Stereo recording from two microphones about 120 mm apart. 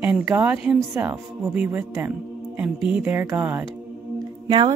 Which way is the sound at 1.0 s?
15° right (ahead or behind).